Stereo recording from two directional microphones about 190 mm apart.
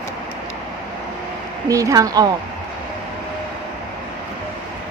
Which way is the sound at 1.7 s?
15° right (ahead or behind).